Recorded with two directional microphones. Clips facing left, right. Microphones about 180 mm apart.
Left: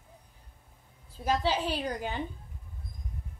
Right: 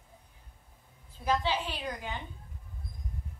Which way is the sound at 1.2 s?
40° left (ahead or behind).